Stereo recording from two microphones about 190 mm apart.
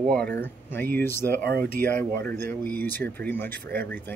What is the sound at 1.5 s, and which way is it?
Speech, 55° right (ahead or behind).